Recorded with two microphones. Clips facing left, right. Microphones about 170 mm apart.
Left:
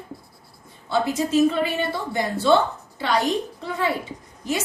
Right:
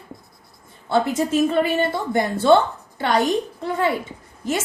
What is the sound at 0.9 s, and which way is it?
A woman's voice, 50° right (ahead or behind).